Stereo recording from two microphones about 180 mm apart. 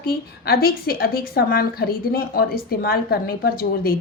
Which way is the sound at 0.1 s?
55° left (ahead or behind).